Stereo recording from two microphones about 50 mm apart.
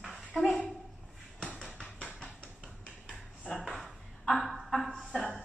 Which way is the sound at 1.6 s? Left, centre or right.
Centre.